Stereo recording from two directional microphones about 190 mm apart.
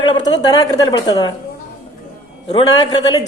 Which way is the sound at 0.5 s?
20° left (ahead or behind).